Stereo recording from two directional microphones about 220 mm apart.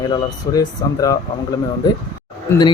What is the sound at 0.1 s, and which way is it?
Speech, 15° left (ahead or behind).